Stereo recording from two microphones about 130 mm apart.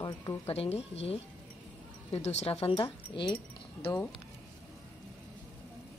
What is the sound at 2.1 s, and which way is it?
Speech, 55° left (ahead or behind).